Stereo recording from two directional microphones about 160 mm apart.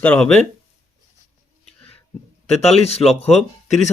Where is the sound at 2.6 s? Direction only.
40° left (ahead or behind).